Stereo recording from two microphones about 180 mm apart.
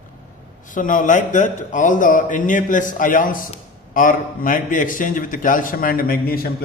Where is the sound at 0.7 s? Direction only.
45° left (ahead or behind).